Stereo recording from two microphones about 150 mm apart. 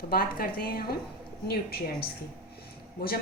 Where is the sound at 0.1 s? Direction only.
80° left.